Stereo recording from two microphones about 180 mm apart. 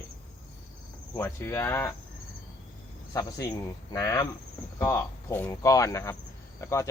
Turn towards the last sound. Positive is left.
turn(degrees=15)  # may be behind; listen again after turning